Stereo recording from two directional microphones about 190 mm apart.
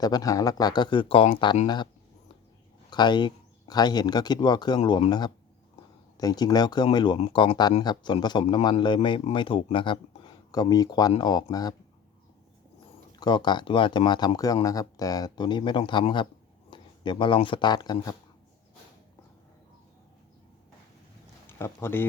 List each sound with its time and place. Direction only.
0.0 s speech: 20° left (ahead or behind)
2.9 s speech: 25° left (ahead or behind)
13.1 s speech: 20° left (ahead or behind)
21.4 s speech: 15° left (ahead or behind)